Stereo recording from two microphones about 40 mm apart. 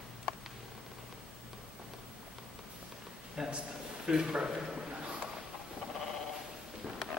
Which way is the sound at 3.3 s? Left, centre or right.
Right.